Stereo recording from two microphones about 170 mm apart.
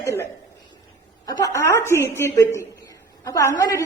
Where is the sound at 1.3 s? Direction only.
20° left (ahead or behind).